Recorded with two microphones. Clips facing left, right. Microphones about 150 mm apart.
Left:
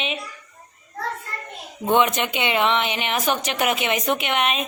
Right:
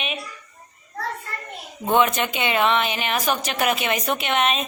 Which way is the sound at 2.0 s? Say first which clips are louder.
Even; 15° left (ahead or behind).